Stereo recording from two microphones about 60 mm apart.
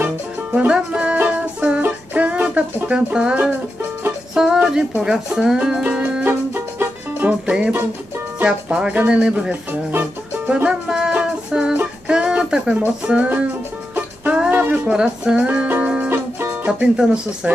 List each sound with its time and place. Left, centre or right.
0.0 s music: right
0.7 s music: centre
4.6 s speech: centre
6.2 s music: right
7.2 s speech: centre
9.7 s music: right
10.5 s music: centre
13.0 s speech: centre
14.5 s a sound: right
14.9 s speech: centre
15.5 s music: centre
16.6 s speech: centre